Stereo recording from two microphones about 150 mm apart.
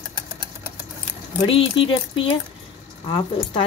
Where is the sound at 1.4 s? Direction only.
35° left (ahead or behind).